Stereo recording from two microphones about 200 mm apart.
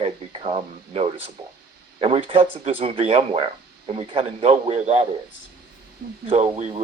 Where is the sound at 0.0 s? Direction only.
30° right (ahead or behind).